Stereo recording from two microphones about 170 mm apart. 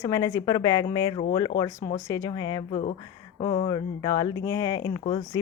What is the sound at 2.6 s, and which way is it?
A woman's voice, 35° left (ahead or behind).